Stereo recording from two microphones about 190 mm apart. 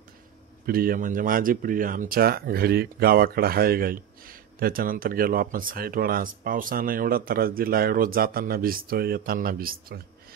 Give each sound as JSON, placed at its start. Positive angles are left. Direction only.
{"t": 0.7, "sound": "speech", "side_deg": -50}